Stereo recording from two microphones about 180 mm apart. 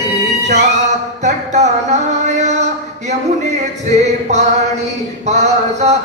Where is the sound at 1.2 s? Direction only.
40° right (ahead or behind).